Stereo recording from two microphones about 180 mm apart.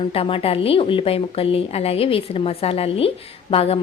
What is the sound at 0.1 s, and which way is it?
A woman's voice, 30° left (ahead or behind).